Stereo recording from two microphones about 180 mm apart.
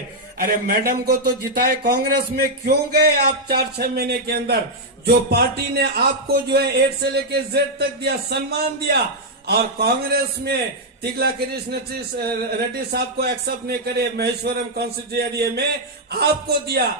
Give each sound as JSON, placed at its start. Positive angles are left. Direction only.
{"t": 0.3, "sound": "speech", "side_deg": -55}